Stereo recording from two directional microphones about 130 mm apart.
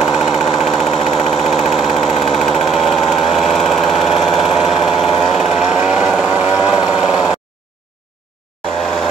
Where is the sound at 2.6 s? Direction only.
Centre (ahead or behind).